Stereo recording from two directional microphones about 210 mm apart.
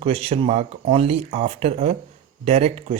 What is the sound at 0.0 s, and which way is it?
Speech, 30° right (ahead or behind).